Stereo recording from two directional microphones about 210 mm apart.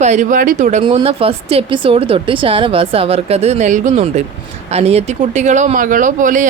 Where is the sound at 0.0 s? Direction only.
35° right (ahead or behind).